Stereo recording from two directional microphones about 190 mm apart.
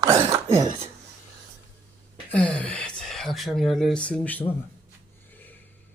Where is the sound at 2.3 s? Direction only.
5° left (ahead or behind).